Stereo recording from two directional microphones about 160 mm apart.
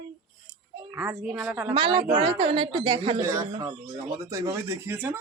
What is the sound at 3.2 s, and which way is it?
A woman's voice, 20° right (ahead or behind).